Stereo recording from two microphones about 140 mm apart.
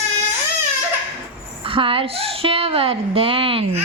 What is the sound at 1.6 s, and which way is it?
A woman's voice, 40° right (ahead or behind).